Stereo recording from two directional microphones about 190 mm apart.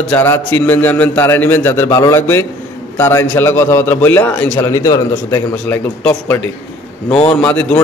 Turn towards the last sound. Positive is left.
turn(degrees=5)  # may be behind; listen again after turning